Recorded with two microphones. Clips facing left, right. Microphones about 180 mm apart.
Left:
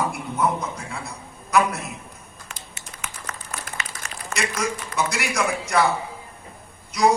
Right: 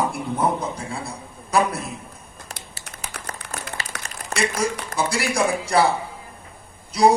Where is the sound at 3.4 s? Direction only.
70° right (ahead or behind).